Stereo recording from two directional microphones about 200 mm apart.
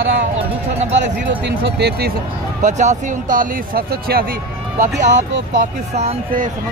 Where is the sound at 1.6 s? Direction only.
55° right (ahead or behind).